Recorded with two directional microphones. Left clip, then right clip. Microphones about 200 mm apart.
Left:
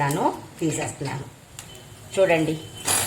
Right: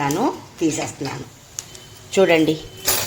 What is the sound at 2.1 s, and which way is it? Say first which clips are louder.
Speech: right 4 dB; 45° right (ahead or behind).